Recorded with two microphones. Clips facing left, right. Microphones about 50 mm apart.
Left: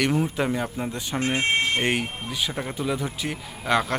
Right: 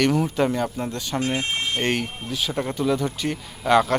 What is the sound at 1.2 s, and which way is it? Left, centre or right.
Speech, left.